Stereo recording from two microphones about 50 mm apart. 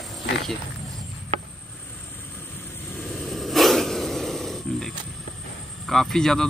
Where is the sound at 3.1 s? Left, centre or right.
Centre.